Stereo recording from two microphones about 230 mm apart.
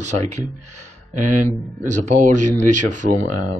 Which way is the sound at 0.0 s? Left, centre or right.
Right.